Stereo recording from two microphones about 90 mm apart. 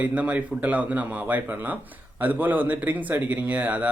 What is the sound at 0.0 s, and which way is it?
Speech, 15° right (ahead or behind).